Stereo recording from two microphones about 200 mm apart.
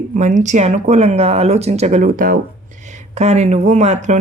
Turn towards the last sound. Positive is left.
turn(degrees=-35)  # may be behind; listen again after turning